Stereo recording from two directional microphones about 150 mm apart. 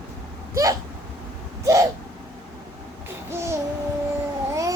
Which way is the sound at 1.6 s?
20° right (ahead or behind).